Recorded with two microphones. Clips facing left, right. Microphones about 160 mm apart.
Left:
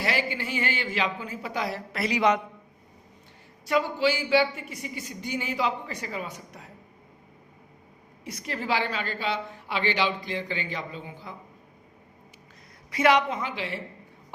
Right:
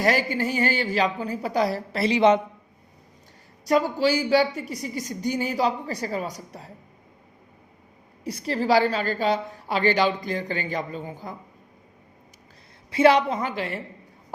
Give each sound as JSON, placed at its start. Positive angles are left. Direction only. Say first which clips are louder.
{"t": 0.0, "sound": "a woman's voice", "louder": "right 6 dB", "side_deg": -45}
{"t": 3.7, "sound": "a woman's voice", "louder": "right 4 dB", "side_deg": -40}
{"t": 8.2, "sound": "a woman's voice", "louder": "right 7 dB", "side_deg": -30}
{"t": 12.9, "sound": "a woman's voice", "louder": "right 4 dB", "side_deg": -30}